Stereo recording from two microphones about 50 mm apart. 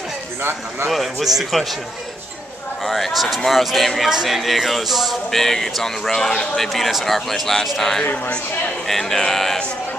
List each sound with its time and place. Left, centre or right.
0.4 s speech: right
0.8 s speech: centre
2.8 s speech: centre
4.1 s speech: centre